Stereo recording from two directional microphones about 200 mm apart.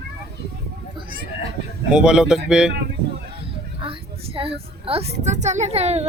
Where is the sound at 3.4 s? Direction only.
25° right (ahead or behind).